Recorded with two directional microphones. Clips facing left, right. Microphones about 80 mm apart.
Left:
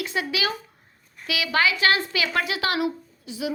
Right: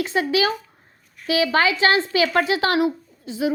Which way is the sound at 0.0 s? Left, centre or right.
Right.